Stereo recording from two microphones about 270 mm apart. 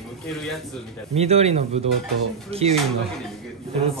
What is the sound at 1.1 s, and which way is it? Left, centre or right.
Speech, right.